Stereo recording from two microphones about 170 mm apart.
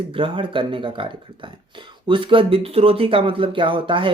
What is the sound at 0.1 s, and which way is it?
Speech, 30° right (ahead or behind).